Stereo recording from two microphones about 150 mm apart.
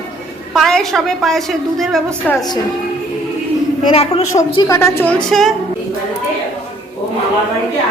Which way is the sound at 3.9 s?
45° left (ahead or behind).